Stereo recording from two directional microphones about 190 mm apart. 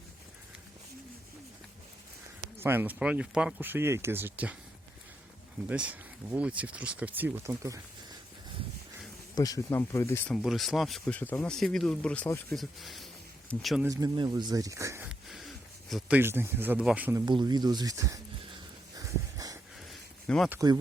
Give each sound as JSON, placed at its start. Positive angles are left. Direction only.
{"t": 2.6, "sound": "speech", "side_deg": -10}
{"t": 5.6, "sound": "speech", "side_deg": -5}
{"t": 9.3, "sound": "speech", "side_deg": 20}
{"t": 10.3, "sound": "speech", "side_deg": 0}
{"t": 13.8, "sound": "speech", "side_deg": -20}
{"t": 18.9, "sound": "wheeze", "side_deg": -20}
{"t": 20.2, "sound": "speech", "side_deg": 5}
{"t": 20.5, "sound": "speech", "side_deg": -20}